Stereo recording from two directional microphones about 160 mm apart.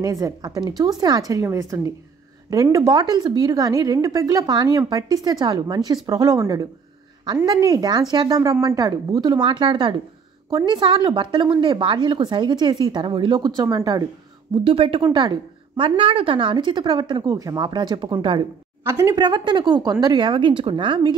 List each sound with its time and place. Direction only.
0.0 s a woman's voice: 20° right (ahead or behind)
14.6 s a woman's voice: 35° right (ahead or behind)